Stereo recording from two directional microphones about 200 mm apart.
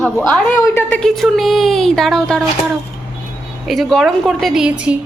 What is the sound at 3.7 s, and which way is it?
Speech, centre (ahead or behind).